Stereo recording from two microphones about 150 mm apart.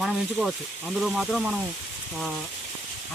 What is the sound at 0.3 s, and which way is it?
Speech, 5° right (ahead or behind).